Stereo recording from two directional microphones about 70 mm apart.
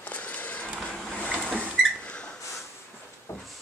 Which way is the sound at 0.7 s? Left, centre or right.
Centre.